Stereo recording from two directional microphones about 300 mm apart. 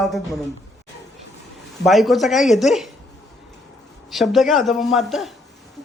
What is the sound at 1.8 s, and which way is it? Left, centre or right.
A woman's voice, centre.